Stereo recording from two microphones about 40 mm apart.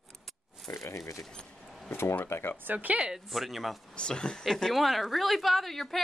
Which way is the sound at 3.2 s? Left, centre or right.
Centre.